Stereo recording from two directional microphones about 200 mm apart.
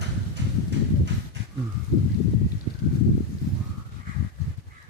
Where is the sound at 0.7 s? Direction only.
60° right (ahead or behind).